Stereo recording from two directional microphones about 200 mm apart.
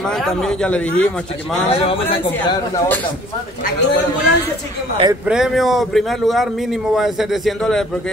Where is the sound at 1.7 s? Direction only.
25° left (ahead or behind).